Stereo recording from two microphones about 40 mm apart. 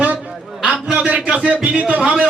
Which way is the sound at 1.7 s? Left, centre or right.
Right.